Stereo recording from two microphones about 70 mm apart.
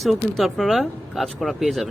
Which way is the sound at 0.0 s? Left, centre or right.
Centre.